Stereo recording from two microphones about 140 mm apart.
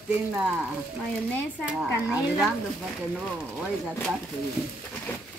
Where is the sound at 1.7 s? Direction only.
5° right (ahead or behind).